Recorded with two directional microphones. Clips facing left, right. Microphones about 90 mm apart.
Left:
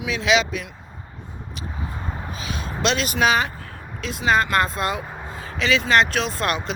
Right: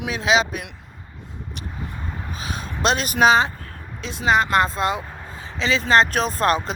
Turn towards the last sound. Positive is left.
turn(degrees=-40)  # may be behind; listen again after turning